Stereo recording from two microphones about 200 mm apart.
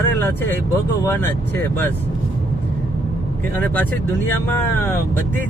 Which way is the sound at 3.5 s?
10° left (ahead or behind).